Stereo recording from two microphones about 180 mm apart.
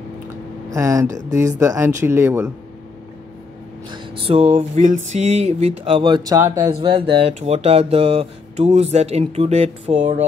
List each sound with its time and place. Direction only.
0.7 s speech: 15° right (ahead or behind)
3.9 s speech: 30° right (ahead or behind)